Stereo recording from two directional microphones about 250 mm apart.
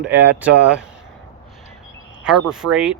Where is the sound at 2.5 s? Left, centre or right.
Centre.